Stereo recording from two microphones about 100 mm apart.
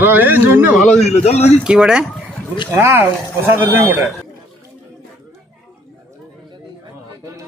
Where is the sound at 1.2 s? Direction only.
90° left.